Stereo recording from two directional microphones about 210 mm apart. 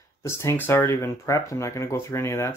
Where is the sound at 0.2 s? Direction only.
15° left (ahead or behind).